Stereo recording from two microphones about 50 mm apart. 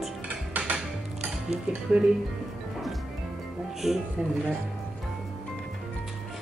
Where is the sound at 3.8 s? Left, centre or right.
Centre.